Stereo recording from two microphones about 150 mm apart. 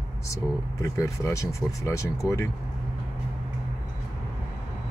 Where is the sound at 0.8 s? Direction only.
20° left (ahead or behind).